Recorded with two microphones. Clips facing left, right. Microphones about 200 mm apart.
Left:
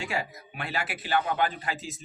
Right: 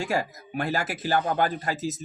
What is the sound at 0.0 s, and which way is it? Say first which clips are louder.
A man's voice: right 5 dB; 40° right (ahead or behind).